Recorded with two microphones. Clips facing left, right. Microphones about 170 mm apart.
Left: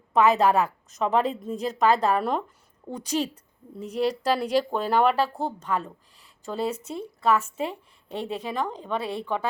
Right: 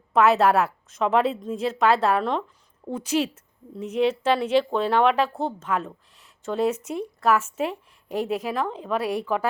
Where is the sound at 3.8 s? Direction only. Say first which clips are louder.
Right 3 dB; 35° left (ahead or behind).